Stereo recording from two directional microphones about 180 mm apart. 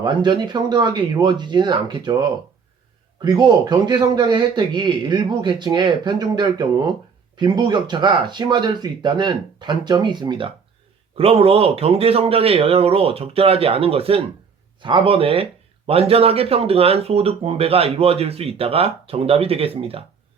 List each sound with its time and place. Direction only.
0.0 s a man's voice: 25° right (ahead or behind)
3.2 s a man's voice: 25° right (ahead or behind)